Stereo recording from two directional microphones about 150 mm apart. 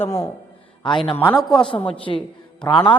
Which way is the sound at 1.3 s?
Centre (ahead or behind).